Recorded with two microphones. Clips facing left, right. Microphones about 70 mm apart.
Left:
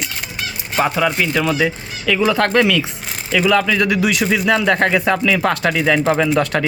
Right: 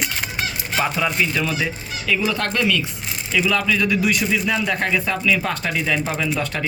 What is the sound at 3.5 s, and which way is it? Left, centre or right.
Speech, left.